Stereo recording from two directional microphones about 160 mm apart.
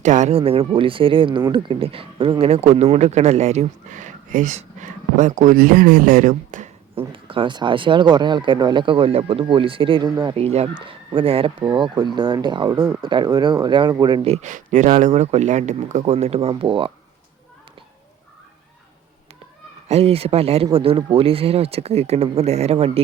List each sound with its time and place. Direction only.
0.0 s speech: 50° right (ahead or behind)
6.9 s speech: 35° right (ahead or behind)
14.3 s speech: 50° right (ahead or behind); by 16.9 s 30° right (ahead or behind)
19.9 s speech: 40° right (ahead or behind)